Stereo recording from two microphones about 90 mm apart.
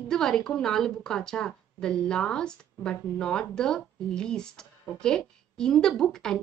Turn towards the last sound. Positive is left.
turn(degrees=5)  # may be behind; listen again after turning